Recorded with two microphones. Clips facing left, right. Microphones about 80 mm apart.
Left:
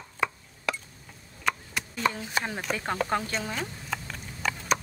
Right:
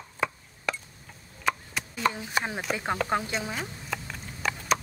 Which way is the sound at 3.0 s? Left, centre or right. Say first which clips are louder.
Right 1 dB; centre.